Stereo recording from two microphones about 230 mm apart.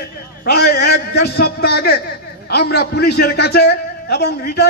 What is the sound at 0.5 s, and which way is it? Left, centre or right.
A man's voice, left.